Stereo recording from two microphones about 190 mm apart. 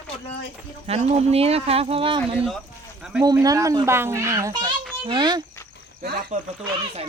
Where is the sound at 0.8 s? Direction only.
35° right (ahead or behind).